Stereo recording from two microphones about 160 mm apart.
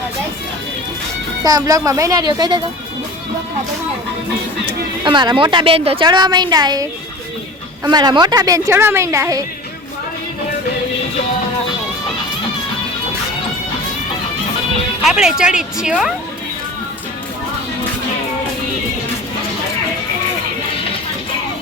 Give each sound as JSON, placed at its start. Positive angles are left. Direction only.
{"t": 1.5, "sound": "a woman's voice", "side_deg": -20}
{"t": 5.0, "sound": "a woman's voice", "side_deg": -30}
{"t": 7.9, "sound": "a woman's voice", "side_deg": -25}
{"t": 15.0, "sound": "speech", "side_deg": -5}